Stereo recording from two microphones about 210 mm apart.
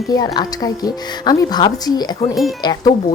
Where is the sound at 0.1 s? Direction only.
20° left (ahead or behind).